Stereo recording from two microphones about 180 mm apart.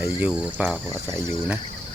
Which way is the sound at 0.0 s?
5° right (ahead or behind).